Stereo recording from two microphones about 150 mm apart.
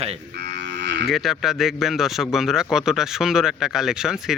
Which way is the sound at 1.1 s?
Centre (ahead or behind).